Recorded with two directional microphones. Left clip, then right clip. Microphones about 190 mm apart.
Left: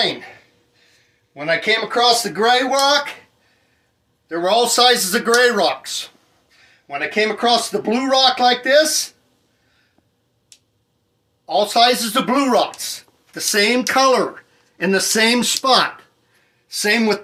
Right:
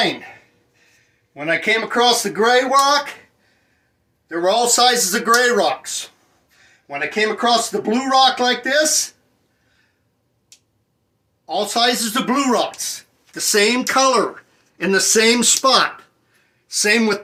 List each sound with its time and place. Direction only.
0.0 s speech: centre (ahead or behind)
4.3 s speech: 15° left (ahead or behind)
11.4 s speech: 20° left (ahead or behind)